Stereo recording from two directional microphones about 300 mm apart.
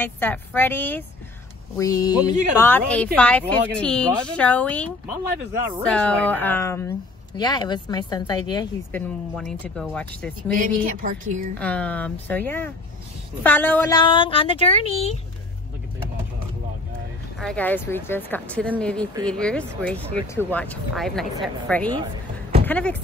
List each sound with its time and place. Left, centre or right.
0.0 s speech: centre
10.6 s a woman's voice: right
11.5 s speech: centre
17.4 s speech: centre